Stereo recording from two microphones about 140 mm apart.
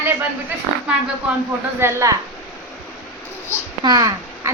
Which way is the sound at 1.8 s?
20° right (ahead or behind).